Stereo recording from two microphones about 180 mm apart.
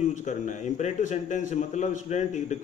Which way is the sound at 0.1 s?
45° left (ahead or behind).